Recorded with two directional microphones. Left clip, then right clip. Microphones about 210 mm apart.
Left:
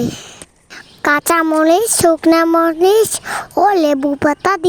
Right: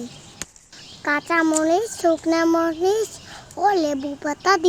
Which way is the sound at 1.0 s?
55° left (ahead or behind).